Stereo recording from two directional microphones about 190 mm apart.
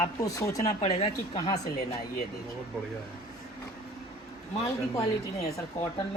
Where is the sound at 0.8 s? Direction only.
35° left (ahead or behind).